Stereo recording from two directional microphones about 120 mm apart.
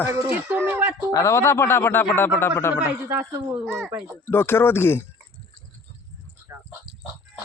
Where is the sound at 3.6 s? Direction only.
5° left (ahead or behind).